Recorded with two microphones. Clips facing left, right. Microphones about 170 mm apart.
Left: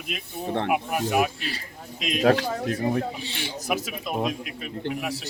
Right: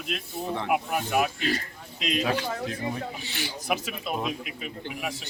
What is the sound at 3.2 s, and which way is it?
Speech, 30° left (ahead or behind).